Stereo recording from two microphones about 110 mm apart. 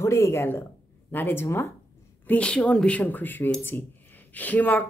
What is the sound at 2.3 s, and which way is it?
Speech, 10° left (ahead or behind).